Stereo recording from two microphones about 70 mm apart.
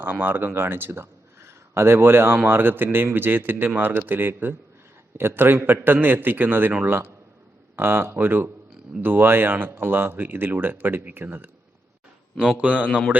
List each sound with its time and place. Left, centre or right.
0.0 s a man's voice: right
12.5 s a man's voice: right